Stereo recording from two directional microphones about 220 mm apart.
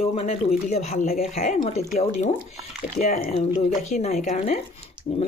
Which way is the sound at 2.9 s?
40° left (ahead or behind).